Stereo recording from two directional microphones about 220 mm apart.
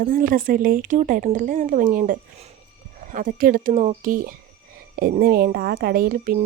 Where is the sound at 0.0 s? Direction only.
40° right (ahead or behind).